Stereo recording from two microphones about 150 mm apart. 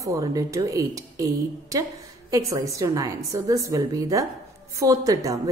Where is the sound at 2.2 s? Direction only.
25° right (ahead or behind).